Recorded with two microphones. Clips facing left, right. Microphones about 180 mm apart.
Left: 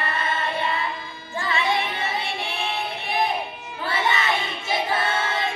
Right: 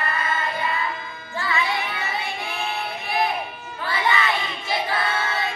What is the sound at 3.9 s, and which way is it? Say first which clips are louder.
Child singing: right 1 dB; 25° left (ahead or behind).